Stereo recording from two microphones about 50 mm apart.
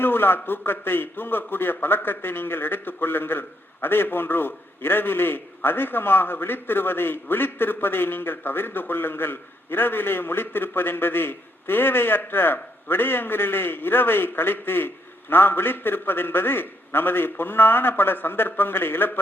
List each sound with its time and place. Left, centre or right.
0.0 s a man's voice: left